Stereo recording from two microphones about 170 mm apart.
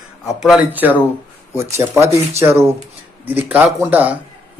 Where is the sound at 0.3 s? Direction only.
Centre (ahead or behind).